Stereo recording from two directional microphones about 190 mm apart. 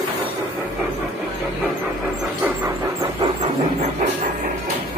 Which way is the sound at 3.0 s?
25° right (ahead or behind).